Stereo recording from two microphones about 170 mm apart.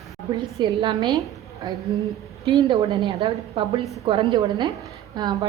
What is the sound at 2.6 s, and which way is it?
A woman's voice, 30° right (ahead or behind).